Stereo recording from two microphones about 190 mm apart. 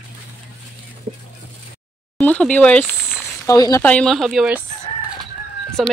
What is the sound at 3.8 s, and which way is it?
Speech, 5° left (ahead or behind).